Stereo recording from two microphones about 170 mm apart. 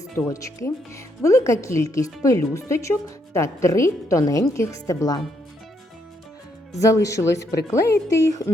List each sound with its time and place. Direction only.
0.3 s a woman's voice: 20° left (ahead or behind)
6.7 s a woman's voice: 20° left (ahead or behind)